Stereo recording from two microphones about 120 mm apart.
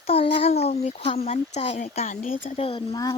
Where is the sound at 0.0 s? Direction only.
55° left (ahead or behind).